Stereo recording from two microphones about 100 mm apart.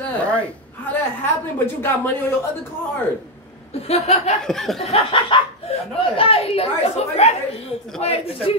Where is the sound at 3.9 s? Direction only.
90° left.